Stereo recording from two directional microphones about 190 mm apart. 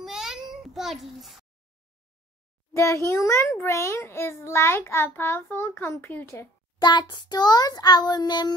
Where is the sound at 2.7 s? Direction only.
15° left (ahead or behind).